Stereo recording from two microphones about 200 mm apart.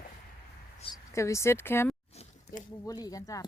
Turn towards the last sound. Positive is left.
turn(degrees=15)  # may be behind; listen again after turning